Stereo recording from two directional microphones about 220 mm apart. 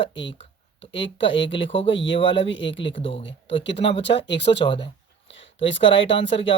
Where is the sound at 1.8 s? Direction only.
55° left (ahead or behind).